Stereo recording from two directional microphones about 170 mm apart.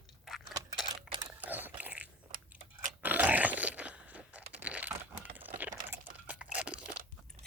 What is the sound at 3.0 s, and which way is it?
Crunch, 10° right (ahead or behind).